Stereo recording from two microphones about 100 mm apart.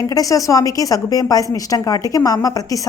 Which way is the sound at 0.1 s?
35° left (ahead or behind).